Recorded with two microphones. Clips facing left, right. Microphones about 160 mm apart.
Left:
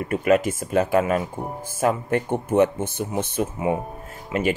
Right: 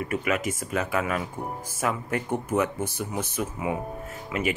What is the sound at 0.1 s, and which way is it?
Speech, 30° left (ahead or behind).